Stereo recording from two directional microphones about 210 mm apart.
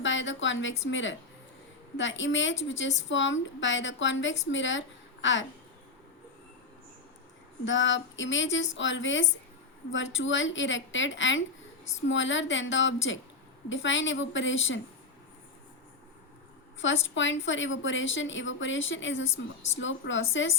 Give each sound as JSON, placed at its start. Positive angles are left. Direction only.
{"t": 0.0, "sound": "a woman's voice", "side_deg": 60}
{"t": 7.6, "sound": "a woman's voice", "side_deg": 60}
{"t": 16.8, "sound": "a woman's voice", "side_deg": 60}